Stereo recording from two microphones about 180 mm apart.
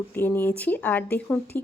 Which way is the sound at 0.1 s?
10° left (ahead or behind).